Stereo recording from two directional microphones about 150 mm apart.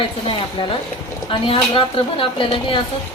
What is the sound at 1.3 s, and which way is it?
A woman's voice, 35° left (ahead or behind).